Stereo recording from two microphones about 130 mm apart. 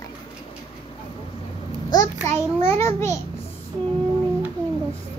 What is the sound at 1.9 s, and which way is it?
Speech, 30° left (ahead or behind).